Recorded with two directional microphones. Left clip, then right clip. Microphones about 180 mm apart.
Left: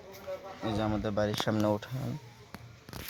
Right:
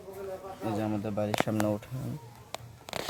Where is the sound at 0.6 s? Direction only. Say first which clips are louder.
Even; 25° left (ahead or behind).